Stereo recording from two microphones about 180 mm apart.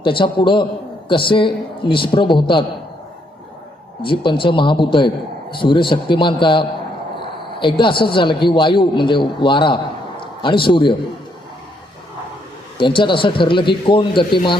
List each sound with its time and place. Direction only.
0.0 s a man's voice: 25° left (ahead or behind)
4.0 s a man's voice: 25° left (ahead or behind)
12.7 s a man's voice: 30° left (ahead or behind)